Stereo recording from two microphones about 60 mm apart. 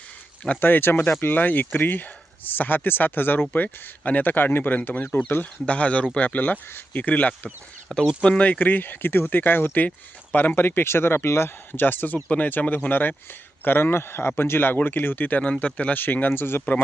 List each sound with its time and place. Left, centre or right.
0.6 s speech: left